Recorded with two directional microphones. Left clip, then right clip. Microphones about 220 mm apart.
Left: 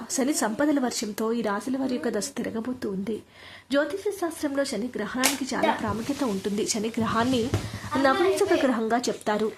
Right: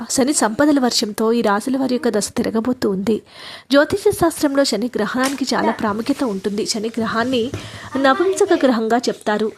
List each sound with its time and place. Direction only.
0.2 s speech: 25° right (ahead or behind)